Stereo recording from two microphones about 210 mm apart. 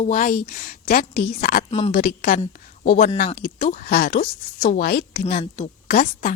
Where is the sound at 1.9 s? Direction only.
45° left (ahead or behind).